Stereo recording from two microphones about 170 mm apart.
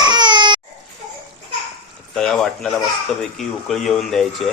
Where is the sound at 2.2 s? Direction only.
5° left (ahead or behind).